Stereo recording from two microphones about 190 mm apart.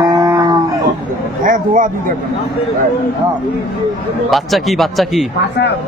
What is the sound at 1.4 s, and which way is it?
Speech, 45° right (ahead or behind).